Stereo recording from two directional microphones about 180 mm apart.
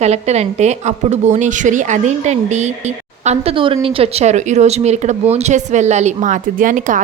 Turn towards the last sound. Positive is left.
turn(degrees=-45)  # may be behind; listen again after turning